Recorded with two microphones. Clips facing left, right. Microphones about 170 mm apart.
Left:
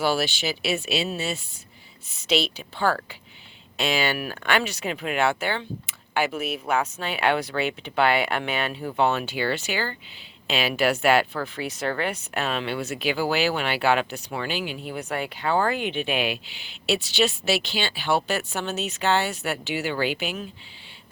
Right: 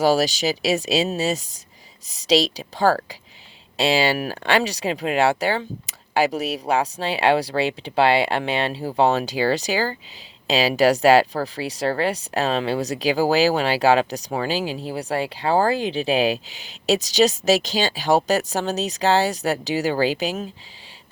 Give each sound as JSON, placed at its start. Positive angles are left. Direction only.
{"t": 0.0, "sound": "speech", "side_deg": -40}